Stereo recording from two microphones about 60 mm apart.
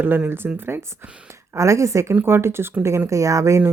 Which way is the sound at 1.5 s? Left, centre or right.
Right.